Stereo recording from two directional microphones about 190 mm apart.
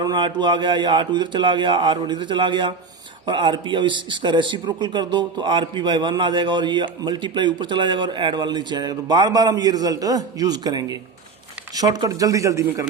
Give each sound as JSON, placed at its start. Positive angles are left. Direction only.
{"t": 0.0, "sound": "a man's voice", "side_deg": -25}